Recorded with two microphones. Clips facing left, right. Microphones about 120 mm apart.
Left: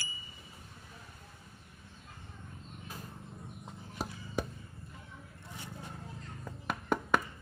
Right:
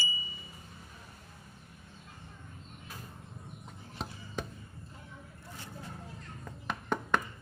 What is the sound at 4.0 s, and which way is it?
Chop, 5° left (ahead or behind).